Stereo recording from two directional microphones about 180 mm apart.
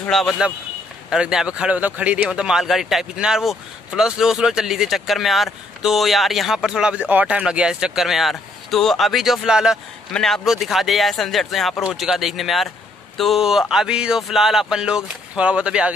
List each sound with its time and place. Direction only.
0.0 s a man's voice: centre (ahead or behind)